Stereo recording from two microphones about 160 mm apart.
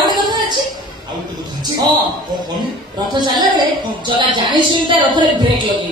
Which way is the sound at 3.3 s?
30° right (ahead or behind).